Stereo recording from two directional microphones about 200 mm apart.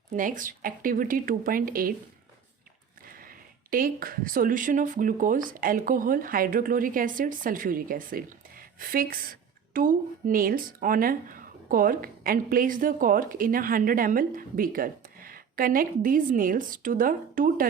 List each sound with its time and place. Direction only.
0.1 s speech: 40° right (ahead or behind)
3.1 s speech: 45° right (ahead or behind)